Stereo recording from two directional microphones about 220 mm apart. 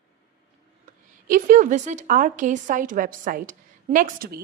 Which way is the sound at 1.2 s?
35° right (ahead or behind).